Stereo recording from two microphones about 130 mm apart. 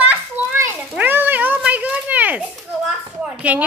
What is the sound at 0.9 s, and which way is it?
Cat, 15° right (ahead or behind).